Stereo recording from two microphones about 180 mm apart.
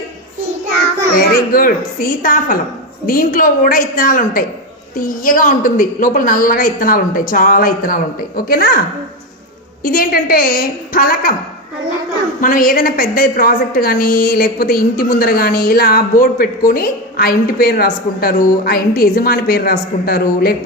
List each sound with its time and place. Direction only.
1.3 s a woman's voice: 55° left (ahead or behind)
9.8 s a woman's voice: 55° left (ahead or behind)
12.4 s a woman's voice: 50° left (ahead or behind)